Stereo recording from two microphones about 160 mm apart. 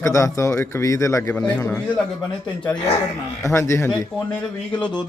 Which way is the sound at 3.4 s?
20° left (ahead or behind).